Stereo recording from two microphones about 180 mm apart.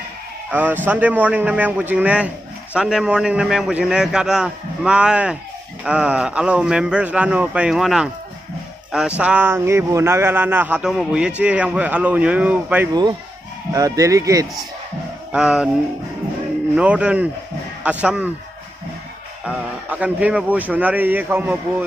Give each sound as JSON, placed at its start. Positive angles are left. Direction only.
{"t": 0.5, "sound": "a man's voice", "side_deg": -10}
{"t": 13.7, "sound": "speech", "side_deg": -20}
{"t": 15.3, "sound": "a man's voice", "side_deg": -5}
{"t": 16.7, "sound": "speech", "side_deg": -5}
{"t": 19.4, "sound": "speech", "side_deg": -5}